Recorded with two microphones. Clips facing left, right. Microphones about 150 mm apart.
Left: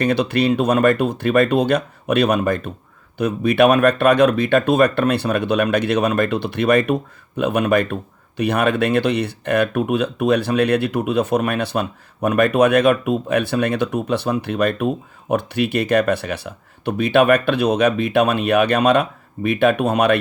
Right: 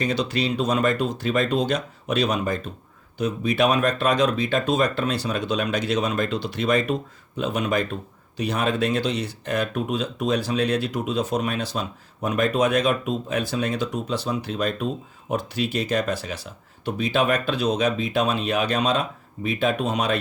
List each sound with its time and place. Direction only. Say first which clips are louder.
0.0 s speech: left 6 dB; 60° left (ahead or behind)